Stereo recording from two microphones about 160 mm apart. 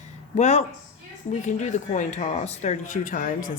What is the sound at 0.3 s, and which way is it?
Speech, 45° left (ahead or behind).